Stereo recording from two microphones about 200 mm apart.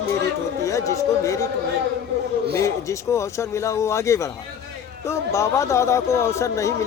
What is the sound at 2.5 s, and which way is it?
Speech, 15° left (ahead or behind).